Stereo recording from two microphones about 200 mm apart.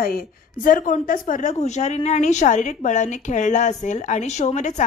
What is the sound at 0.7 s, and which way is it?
A woman's voice, 40° left (ahead or behind).